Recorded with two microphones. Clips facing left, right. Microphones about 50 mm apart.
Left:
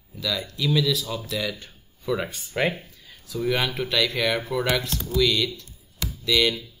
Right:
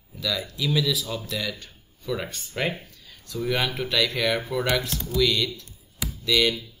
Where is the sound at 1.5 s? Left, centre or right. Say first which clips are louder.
Left 1 dB; centre.